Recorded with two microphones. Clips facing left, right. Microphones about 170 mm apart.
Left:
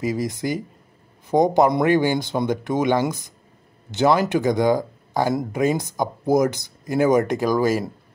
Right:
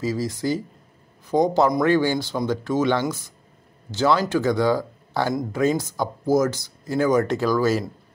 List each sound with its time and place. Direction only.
0.0 s speech: 20° left (ahead or behind)